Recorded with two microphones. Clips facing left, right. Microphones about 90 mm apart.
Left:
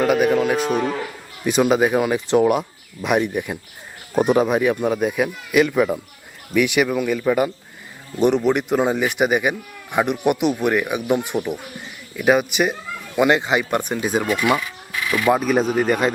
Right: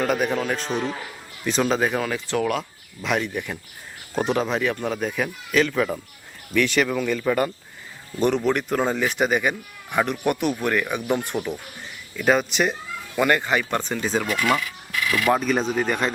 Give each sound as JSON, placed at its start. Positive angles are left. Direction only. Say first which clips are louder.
{"t": 0.0, "sound": "a man's voice", "louder": "left 6 dB", "side_deg": 5}
{"t": 0.7, "sound": "speech", "louder": "left 5 dB", "side_deg": 55}
{"t": 1.5, "sound": "speech", "louder": "left 5 dB", "side_deg": 15}
{"t": 15.3, "sound": "speech", "louder": "left 4 dB", "side_deg": 5}